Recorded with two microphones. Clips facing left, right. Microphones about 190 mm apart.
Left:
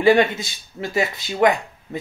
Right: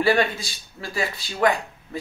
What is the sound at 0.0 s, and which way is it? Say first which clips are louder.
Speech: left 5 dB; 20° left (ahead or behind).